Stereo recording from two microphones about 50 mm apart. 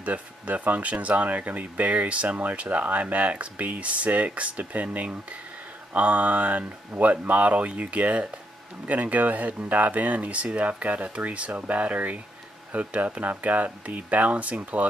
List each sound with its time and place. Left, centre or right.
0.0 s speech: right